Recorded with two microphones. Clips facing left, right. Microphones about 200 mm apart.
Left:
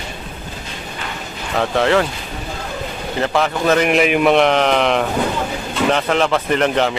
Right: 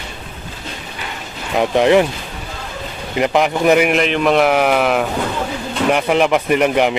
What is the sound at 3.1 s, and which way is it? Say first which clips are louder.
Speech: right 3 dB; 15° right (ahead or behind).